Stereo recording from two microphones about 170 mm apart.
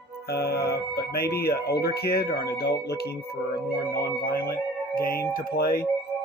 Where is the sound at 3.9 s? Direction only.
65° left (ahead or behind).